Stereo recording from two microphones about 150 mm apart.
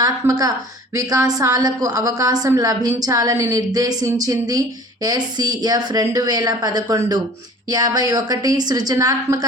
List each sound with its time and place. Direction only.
0.0 s a woman's voice: 25° right (ahead or behind)